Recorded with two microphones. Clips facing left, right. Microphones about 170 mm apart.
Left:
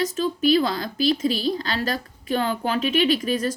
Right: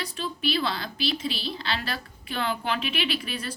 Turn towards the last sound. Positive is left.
turn(degrees=40)  # may be behind; listen again after turning